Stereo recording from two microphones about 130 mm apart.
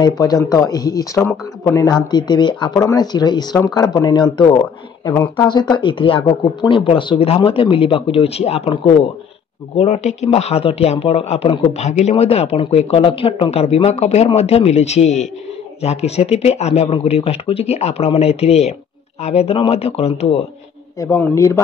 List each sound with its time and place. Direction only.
0.0 s speech: 25° left (ahead or behind); by 20.4 s 55° left (ahead or behind)
21.2 s speech: 20° left (ahead or behind)